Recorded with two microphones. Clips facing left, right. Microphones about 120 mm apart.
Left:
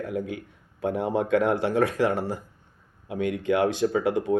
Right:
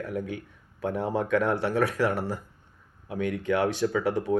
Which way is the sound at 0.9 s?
15° left (ahead or behind).